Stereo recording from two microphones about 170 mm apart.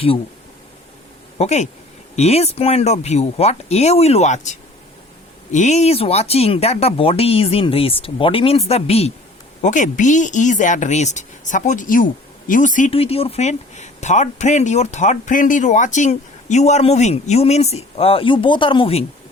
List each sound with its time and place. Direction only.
1.4 s speech: 40° left (ahead or behind)
12.9 s speech: 35° left (ahead or behind)